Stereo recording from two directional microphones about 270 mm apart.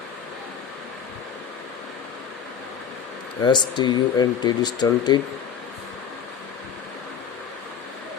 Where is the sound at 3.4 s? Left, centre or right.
Centre.